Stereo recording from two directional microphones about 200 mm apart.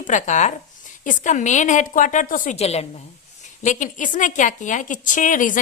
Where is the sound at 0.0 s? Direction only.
40° left (ahead or behind).